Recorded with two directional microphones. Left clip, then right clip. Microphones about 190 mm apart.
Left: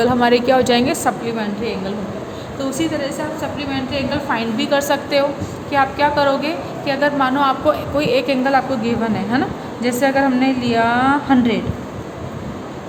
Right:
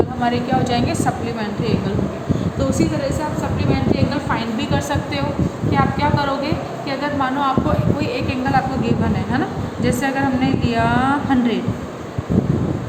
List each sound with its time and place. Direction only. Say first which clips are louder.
0.2 s a woman's voice: left 6 dB; 50° left (ahead or behind)
4.3 s a woman's voice: left 3 dB; 45° left (ahead or behind)
9.8 s a woman's voice: left 4 dB; 35° left (ahead or behind)